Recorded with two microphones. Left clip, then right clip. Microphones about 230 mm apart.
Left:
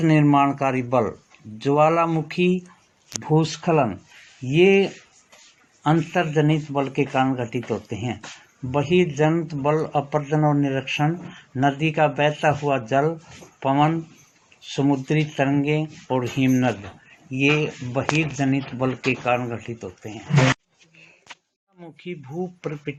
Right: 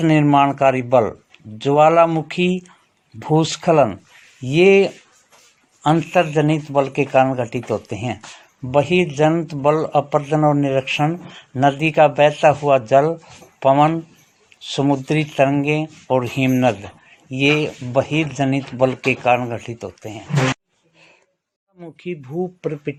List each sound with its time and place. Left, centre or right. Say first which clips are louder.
0.0 s speech: right 4 dB; right
21.8 s speech: right 6 dB; right